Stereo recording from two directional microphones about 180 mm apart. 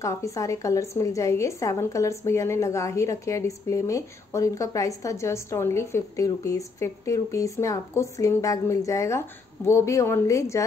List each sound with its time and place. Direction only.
0.0 s a woman's voice: 15° left (ahead or behind)